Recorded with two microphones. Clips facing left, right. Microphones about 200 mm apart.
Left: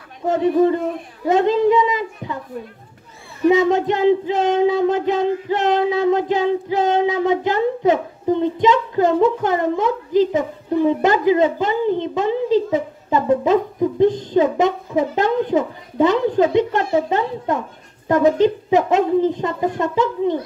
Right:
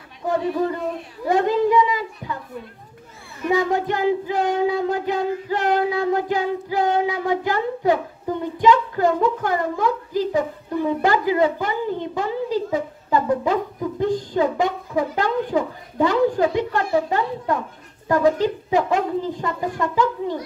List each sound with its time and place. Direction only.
0.3 s child singing: 20° left (ahead or behind)
1.2 s a woman's voice: 20° left (ahead or behind)
3.4 s child singing: 20° left (ahead or behind)